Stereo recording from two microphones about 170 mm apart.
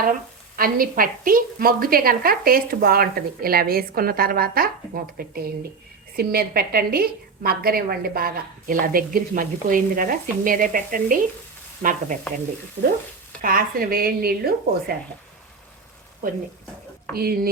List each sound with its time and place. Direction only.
0.5 s a woman's voice: 60° right (ahead or behind)
11.8 s sizzle: 50° right (ahead or behind)
13.4 s a woman's voice: 55° right (ahead or behind)
17.2 s a woman's voice: 60° right (ahead or behind)